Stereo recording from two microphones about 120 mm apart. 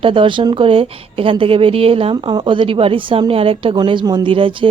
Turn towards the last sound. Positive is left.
turn(degrees=-45)  # may be behind; listen again after turning